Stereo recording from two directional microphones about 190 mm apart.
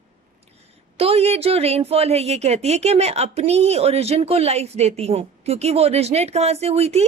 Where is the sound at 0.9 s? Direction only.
30° right (ahead or behind).